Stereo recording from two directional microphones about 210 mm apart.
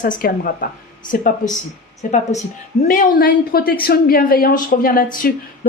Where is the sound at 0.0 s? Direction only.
40° left (ahead or behind).